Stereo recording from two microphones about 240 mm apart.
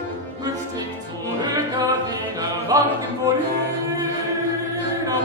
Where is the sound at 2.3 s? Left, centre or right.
Centre.